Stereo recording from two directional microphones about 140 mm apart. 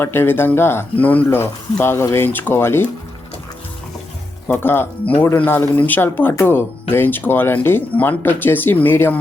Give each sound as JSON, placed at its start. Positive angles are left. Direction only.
{"t": 0.0, "sound": "speech", "side_deg": 15}
{"t": 4.4, "sound": "speech", "side_deg": 15}